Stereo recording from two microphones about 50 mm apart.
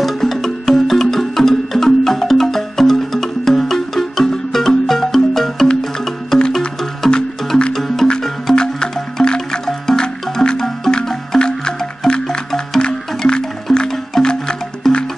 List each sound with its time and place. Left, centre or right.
0.0 s music: centre